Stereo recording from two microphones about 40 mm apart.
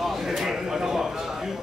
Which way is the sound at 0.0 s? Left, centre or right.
Centre.